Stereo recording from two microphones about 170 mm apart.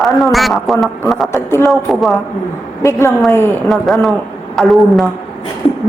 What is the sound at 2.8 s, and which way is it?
Speech, 15° left (ahead or behind).